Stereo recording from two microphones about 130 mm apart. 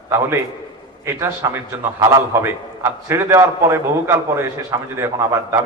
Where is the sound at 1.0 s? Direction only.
20° right (ahead or behind).